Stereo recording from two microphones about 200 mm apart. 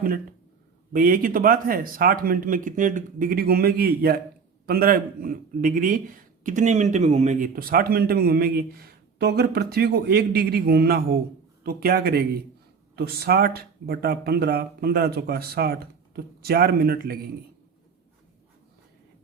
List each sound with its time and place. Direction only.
0.9 s speech: 45° right (ahead or behind)